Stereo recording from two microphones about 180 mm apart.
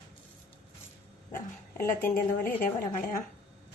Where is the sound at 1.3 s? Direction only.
50° left (ahead or behind).